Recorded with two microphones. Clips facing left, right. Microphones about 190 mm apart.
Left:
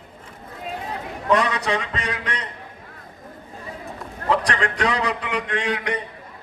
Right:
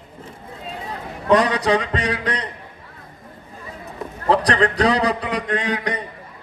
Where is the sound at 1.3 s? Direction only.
35° right (ahead or behind).